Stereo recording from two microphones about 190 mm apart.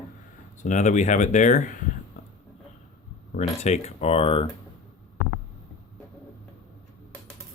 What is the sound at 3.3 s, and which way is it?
Speech, 35° left (ahead or behind).